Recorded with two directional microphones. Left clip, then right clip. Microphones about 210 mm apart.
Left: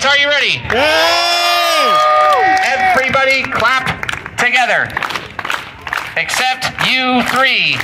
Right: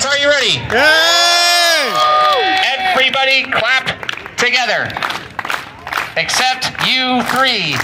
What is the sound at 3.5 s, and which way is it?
Music, 65° left (ahead or behind).